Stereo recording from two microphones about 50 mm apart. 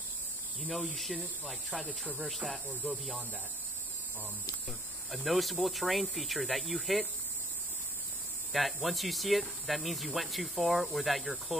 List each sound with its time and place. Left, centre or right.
0.6 s speech: centre
1.9 s speech: left
4.6 s speech: centre
8.5 s speech: centre